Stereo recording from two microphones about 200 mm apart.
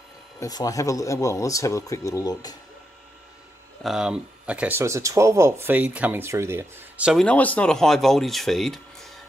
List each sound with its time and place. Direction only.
0.4 s speech: 20° left (ahead or behind)
3.8 s speech: 5° right (ahead or behind)